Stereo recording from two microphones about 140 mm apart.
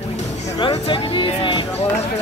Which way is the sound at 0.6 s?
40° left (ahead or behind).